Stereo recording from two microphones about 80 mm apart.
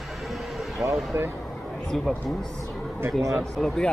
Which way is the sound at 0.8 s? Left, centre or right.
Right.